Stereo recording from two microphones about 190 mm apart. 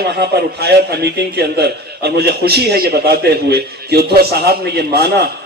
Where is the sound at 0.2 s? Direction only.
60° right (ahead or behind).